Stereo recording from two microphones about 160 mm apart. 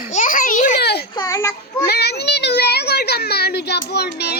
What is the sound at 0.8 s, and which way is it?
Speech, 90° left.